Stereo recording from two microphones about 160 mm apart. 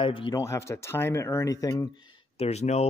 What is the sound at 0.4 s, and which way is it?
Speech, 20° left (ahead or behind).